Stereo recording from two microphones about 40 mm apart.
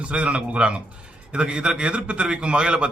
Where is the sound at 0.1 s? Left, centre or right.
Right.